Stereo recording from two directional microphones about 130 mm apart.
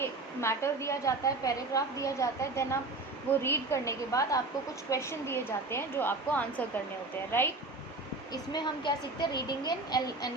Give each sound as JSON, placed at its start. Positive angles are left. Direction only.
{"t": 0.0, "sound": "a woman's voice", "side_deg": 20}
{"t": 8.3, "sound": "speech", "side_deg": 35}